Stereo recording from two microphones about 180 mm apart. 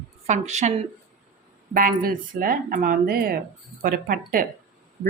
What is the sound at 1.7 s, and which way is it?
Speech, 50° right (ahead or behind).